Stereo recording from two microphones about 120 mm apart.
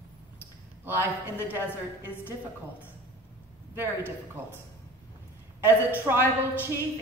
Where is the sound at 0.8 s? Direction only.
20° right (ahead or behind).